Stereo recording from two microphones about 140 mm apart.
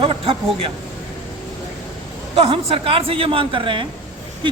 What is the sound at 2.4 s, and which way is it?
Speech, 40° right (ahead or behind).